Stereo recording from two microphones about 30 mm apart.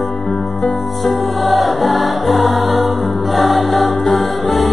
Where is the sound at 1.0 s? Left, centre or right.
Centre.